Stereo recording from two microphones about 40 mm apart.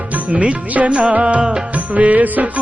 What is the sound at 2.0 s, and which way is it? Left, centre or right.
Music, right.